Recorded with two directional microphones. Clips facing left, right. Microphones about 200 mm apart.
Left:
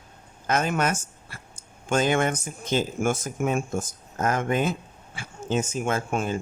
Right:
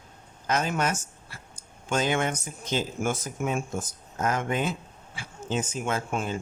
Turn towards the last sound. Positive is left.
turn(degrees=50)  # may be behind; listen again after turning